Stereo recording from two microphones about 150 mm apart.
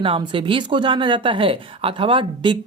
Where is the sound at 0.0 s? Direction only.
35° right (ahead or behind).